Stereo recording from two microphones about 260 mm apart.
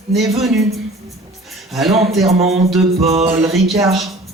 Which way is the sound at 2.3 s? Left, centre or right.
Right.